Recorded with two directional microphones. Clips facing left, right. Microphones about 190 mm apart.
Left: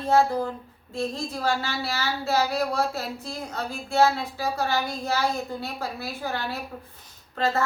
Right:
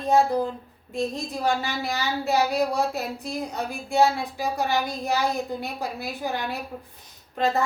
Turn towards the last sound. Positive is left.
turn(degrees=-15)  # may be behind; listen again after turning